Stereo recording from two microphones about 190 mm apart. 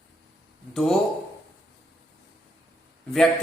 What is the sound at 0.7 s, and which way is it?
Speech, centre (ahead or behind).